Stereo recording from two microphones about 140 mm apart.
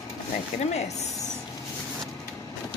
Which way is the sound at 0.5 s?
55° left (ahead or behind).